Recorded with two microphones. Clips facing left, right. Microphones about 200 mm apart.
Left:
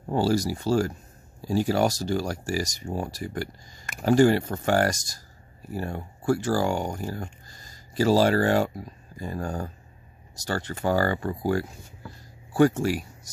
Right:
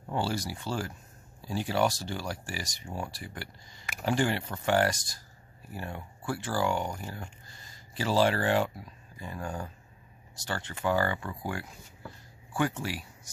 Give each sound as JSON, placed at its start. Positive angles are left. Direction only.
{"t": 0.0, "sound": "speech", "side_deg": 40}